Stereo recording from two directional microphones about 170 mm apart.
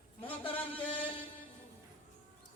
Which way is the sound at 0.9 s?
30° left (ahead or behind).